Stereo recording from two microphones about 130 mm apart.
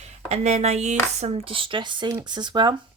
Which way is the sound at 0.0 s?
60° right (ahead or behind).